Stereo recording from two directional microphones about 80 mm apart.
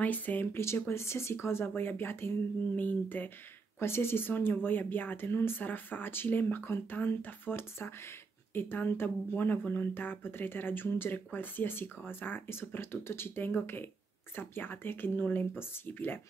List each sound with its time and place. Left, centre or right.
0.0 s speech: left